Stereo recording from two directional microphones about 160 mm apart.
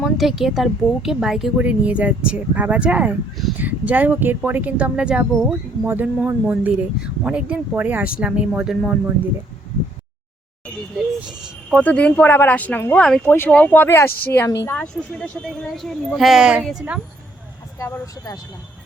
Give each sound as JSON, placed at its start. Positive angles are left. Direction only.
{"t": 0.0, "sound": "speech", "side_deg": 0}
{"t": 11.0, "sound": "vehicle", "side_deg": 0}
{"t": 11.8, "sound": "speech", "side_deg": 10}
{"t": 14.1, "sound": "a woman's voice", "side_deg": 70}
{"t": 14.6, "sound": "a woman's voice", "side_deg": 10}
{"t": 17.7, "sound": "speech", "side_deg": 15}